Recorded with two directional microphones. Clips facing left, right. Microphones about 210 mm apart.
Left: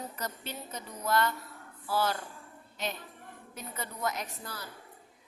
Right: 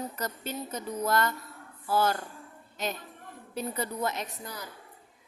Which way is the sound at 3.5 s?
30° right (ahead or behind).